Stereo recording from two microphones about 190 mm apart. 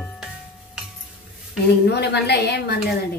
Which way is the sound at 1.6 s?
60° left (ahead or behind).